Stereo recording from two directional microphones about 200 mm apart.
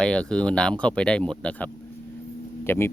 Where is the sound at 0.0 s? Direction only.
5° left (ahead or behind).